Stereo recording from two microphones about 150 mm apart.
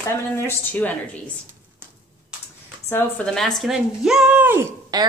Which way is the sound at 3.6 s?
Centre (ahead or behind).